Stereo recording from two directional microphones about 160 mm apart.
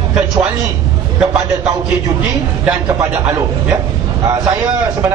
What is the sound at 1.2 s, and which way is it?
A man's voice, 5° right (ahead or behind).